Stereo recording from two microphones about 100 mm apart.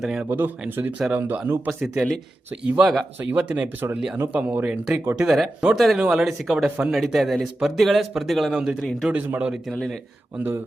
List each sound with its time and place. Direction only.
0.0 s speech: 5° right (ahead or behind)
0.3 s speech: 20° right (ahead or behind)
1.8 s speech: centre (ahead or behind)
2.5 s speech: 15° right (ahead or behind)
2.8 s speech: centre (ahead or behind)
3.2 s speech: 15° right (ahead or behind)
9.0 s speech: 15° right (ahead or behind)
9.7 s speech: 5° left (ahead or behind)
10.3 s speech: 20° right (ahead or behind)